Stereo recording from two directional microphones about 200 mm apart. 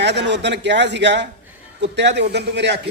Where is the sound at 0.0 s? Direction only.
60° right (ahead or behind).